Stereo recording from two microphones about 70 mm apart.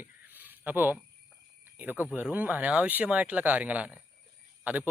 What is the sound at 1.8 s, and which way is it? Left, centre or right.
Speech, right.